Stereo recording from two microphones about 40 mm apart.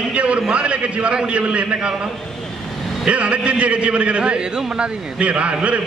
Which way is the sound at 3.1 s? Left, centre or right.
Right.